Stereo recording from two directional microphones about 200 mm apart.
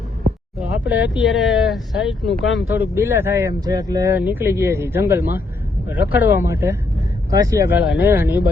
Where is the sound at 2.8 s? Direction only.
15° right (ahead or behind).